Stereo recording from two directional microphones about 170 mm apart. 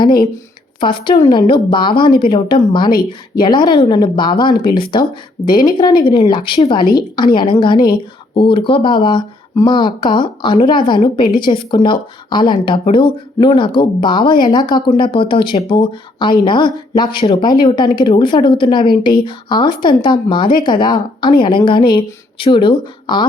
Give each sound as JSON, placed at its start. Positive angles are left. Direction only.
{"t": 0.8, "sound": "speech", "side_deg": 30}